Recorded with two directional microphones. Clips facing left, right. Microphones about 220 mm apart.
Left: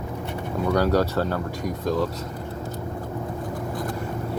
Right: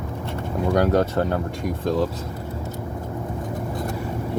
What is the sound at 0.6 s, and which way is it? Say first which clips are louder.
Speech: right 2 dB; 25° right (ahead or behind).